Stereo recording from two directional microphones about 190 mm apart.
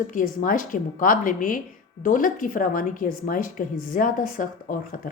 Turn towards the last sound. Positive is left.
turn(degrees=45)  # may be behind; listen again after turning